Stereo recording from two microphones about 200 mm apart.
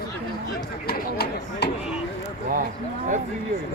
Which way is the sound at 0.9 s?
55° left (ahead or behind).